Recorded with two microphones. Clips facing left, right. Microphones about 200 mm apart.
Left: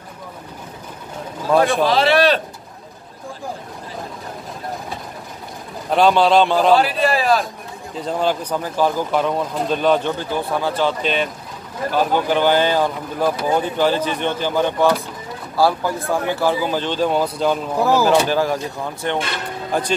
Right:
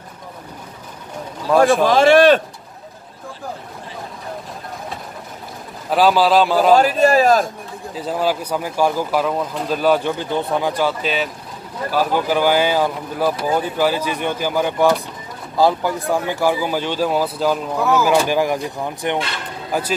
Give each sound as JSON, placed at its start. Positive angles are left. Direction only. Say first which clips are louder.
{"t": 1.8, "sound": "a man's voice", "louder": "right 4 dB", "side_deg": -45}
{"t": 5.9, "sound": "a man's voice", "louder": "even", "side_deg": -5}
{"t": 6.7, "sound": "a man's voice", "louder": "right 3 dB", "side_deg": -45}
{"t": 7.9, "sound": "speech", "louder": "even", "side_deg": -5}
{"t": 17.7, "sound": "speech", "louder": "left 2 dB", "side_deg": 30}
{"t": 18.0, "sound": "speech", "louder": "even", "side_deg": -10}